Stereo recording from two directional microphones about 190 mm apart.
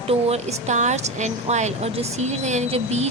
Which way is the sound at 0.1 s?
35° right (ahead or behind).